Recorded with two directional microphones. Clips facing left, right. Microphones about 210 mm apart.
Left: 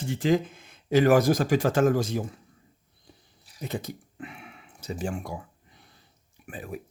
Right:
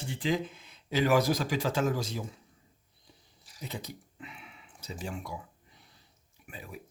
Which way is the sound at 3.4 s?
55° left (ahead or behind).